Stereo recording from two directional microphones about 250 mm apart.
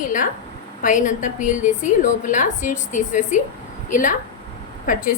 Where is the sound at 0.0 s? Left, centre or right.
Left.